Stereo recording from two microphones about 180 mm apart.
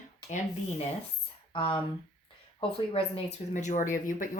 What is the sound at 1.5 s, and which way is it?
Speech, 30° left (ahead or behind).